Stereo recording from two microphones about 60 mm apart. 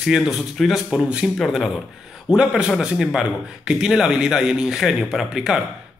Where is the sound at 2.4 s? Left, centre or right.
Centre.